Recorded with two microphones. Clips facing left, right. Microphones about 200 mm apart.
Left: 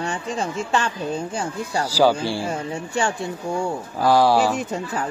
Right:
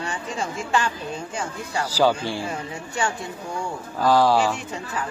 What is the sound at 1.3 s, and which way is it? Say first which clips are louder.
Speech: left 3 dB; 30° left (ahead or behind).